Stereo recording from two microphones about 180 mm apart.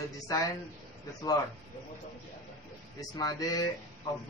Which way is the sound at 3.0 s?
20° left (ahead or behind).